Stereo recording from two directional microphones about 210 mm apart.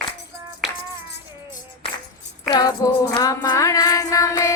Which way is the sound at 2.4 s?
20° left (ahead or behind).